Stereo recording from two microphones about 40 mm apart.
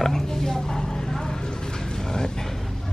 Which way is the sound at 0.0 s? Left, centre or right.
Centre.